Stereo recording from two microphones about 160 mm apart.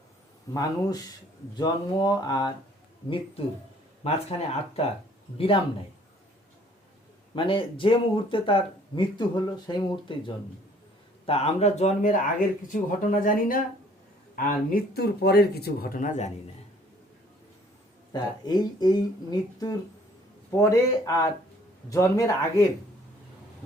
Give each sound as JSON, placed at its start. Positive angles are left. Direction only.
{"t": 0.5, "sound": "speech", "side_deg": 25}
{"t": 4.0, "sound": "speech", "side_deg": 40}
{"t": 7.3, "sound": "speech", "side_deg": 30}
{"t": 11.3, "sound": "speech", "side_deg": 40}
{"t": 18.1, "sound": "speech", "side_deg": 25}